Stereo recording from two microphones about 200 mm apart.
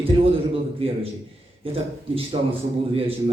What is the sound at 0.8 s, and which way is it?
Speech, 30° right (ahead or behind).